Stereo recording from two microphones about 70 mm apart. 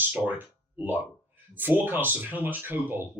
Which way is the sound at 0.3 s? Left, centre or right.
Right.